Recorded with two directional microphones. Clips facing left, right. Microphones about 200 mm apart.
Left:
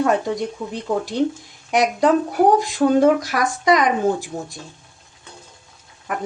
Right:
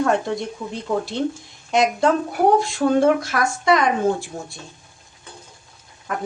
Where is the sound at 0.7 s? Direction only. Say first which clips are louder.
Right 1 dB; 15° left (ahead or behind).